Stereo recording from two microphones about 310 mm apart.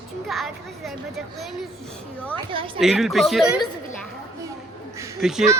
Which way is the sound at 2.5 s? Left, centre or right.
Centre.